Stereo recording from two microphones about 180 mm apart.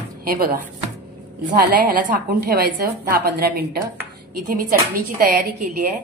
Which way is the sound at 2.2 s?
55° right (ahead or behind).